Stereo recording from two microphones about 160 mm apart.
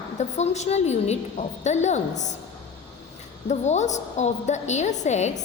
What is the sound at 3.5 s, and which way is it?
A woman's voice, 45° left (ahead or behind).